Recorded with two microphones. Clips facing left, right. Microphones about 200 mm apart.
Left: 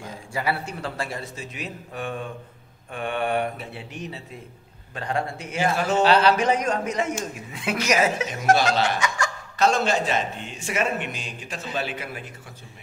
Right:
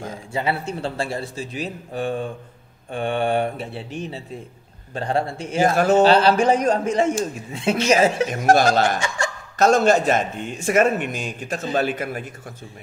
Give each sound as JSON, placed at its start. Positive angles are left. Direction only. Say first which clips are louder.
{"t": 0.3, "sound": "a man's voice", "louder": "right 3 dB", "side_deg": -25}
{"t": 5.6, "sound": "a man's voice", "louder": "right 6 dB", "side_deg": -45}
{"t": 6.0, "sound": "speech", "louder": "right 3 dB", "side_deg": -30}
{"t": 8.5, "sound": "a man's voice", "louder": "right 4 dB", "side_deg": -45}